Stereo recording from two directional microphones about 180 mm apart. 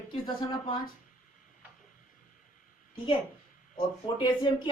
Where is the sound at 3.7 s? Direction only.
25° left (ahead or behind).